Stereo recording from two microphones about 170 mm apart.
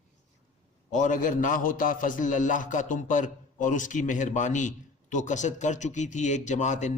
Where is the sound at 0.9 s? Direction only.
50° left (ahead or behind).